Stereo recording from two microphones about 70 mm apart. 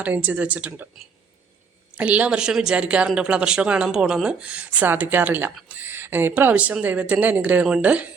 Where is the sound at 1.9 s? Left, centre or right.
Centre.